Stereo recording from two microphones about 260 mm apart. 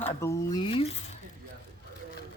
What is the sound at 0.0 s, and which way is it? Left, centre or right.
Speech, centre.